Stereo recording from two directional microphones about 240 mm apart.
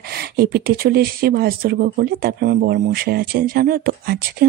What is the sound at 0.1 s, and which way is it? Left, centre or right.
Speech, right.